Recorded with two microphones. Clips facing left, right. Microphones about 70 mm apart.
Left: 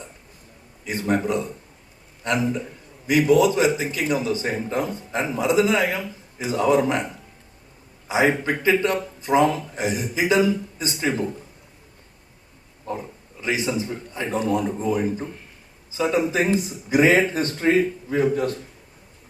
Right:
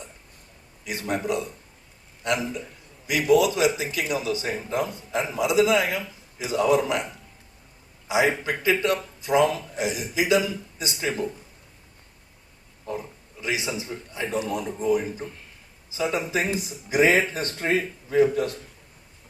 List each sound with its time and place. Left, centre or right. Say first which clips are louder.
0.9 s speech: left 4 dB; left
3.1 s speech: left 3 dB; left
8.0 s speech: left 2 dB; left
13.4 s speech: left 4 dB; left